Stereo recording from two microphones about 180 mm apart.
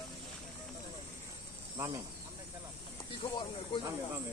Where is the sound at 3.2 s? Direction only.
30° left (ahead or behind).